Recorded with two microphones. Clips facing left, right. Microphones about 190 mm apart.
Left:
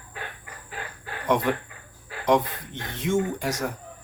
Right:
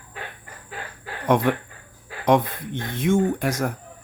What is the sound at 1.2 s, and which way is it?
Speech, 55° right (ahead or behind).